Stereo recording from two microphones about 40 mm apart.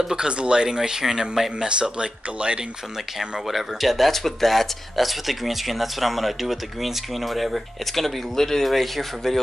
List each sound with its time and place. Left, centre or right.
0.0 s speech: centre
1.7 s speech: right
3.2 s speech: centre